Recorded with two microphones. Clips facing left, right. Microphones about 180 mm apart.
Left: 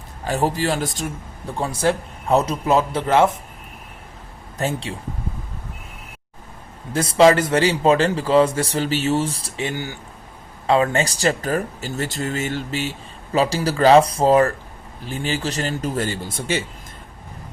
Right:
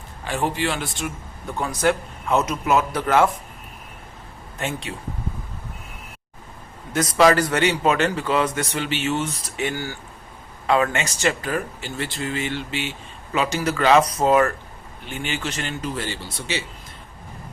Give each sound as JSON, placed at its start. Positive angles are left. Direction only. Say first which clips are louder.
{"t": 0.3, "sound": "speech", "louder": "left 3 dB", "side_deg": 40}
{"t": 4.5, "sound": "speech", "louder": "left 4 dB", "side_deg": 35}
{"t": 6.9, "sound": "speech", "louder": "left 3 dB", "side_deg": 25}